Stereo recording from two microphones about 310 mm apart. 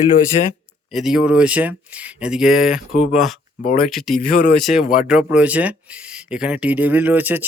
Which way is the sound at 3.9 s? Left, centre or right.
Centre.